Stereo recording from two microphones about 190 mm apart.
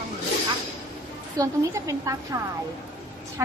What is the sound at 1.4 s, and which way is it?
A woman's voice, 15° right (ahead or behind).